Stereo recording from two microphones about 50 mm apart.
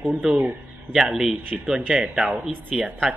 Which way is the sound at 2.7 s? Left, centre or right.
Centre.